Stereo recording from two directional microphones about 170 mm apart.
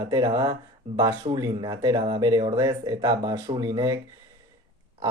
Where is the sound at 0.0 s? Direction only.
25° right (ahead or behind).